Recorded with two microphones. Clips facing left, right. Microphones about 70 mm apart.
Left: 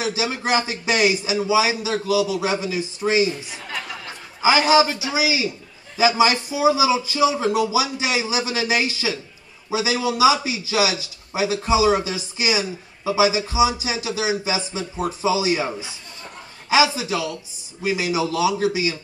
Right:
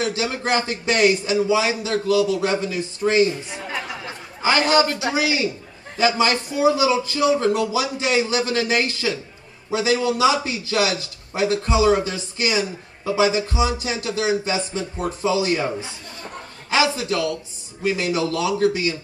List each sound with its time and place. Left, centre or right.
0.0 s a man's voice: centre
3.6 s chatter: centre
4.4 s a man's voice: centre